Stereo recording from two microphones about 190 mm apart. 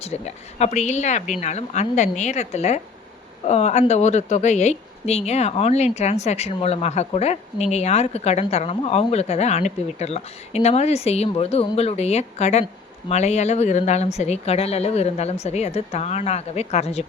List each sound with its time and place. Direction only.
0.0 s speech: 35° left (ahead or behind)